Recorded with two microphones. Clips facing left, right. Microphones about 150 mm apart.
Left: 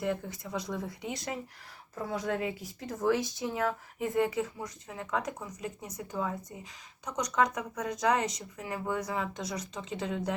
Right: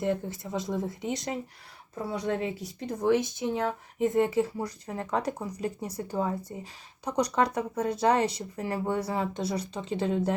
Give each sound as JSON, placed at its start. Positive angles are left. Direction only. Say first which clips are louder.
{"t": 0.0, "sound": "speech", "louder": "right 4 dB", "side_deg": -30}